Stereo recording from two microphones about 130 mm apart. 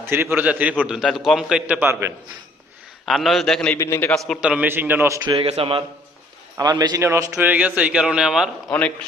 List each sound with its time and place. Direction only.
0.0 s a man's voice: 15° right (ahead or behind)
3.1 s a man's voice: centre (ahead or behind)
3.8 s a man's voice: 20° left (ahead or behind)
4.4 s a man's voice: 10° right (ahead or behind)
5.3 s a man's voice: 45° right (ahead or behind)
6.6 s a man's voice: 30° right (ahead or behind); by 8.4 s 5° right (ahead or behind)
8.7 s a man's voice: 10° left (ahead or behind)